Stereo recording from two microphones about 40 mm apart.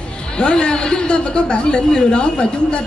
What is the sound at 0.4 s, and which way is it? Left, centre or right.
Speech, left.